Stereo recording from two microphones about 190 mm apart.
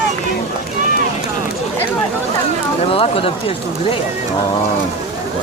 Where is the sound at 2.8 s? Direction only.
30° left (ahead or behind).